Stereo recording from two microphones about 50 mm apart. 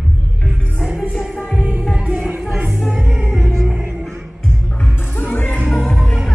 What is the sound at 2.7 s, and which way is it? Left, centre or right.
Music, centre.